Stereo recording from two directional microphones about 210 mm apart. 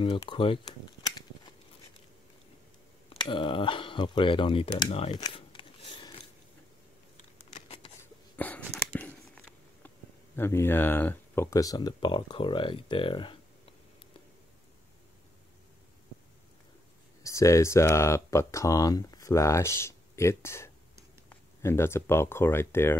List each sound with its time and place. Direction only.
0.0 s speech: 25° left (ahead or behind)
3.1 s speech: 25° left (ahead or behind)
7.2 s a sound: 30° left (ahead or behind)
8.4 s a sound: 10° left (ahead or behind)
9.8 s speech: 10° left (ahead or behind)
17.2 s speech: 15° left (ahead or behind)